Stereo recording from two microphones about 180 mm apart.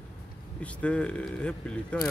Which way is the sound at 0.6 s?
5° left (ahead or behind).